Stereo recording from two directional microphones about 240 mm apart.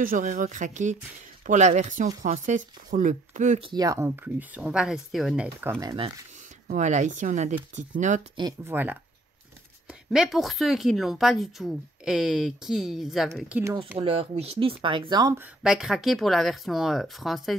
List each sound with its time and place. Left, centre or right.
0.0 s speech: right
3.7 s speech: centre
6.7 s speech: right
8.4 s a woman's voice: centre
13.9 s speech: right
15.6 s a woman's voice: centre